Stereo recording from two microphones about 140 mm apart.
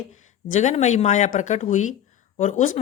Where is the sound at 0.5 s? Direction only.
55° left (ahead or behind).